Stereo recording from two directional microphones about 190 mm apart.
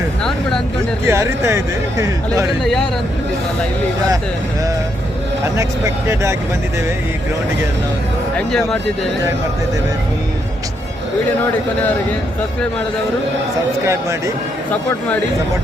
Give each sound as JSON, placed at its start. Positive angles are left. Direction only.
{"t": 0.2, "sound": "vehicle", "side_deg": 0}
{"t": 1.0, "sound": "speech", "side_deg": -15}
{"t": 2.6, "sound": "speech", "side_deg": 0}
{"t": 5.5, "sound": "speech", "side_deg": -15}
{"t": 8.4, "sound": "speech", "side_deg": 5}
{"t": 13.8, "sound": "speech", "side_deg": -15}
{"t": 14.7, "sound": "speech", "side_deg": 10}